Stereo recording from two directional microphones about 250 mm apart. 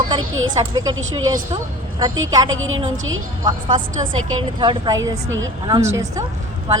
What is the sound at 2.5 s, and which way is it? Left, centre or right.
Speech, right.